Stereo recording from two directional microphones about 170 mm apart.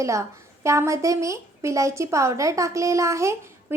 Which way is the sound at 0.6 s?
15° right (ahead or behind).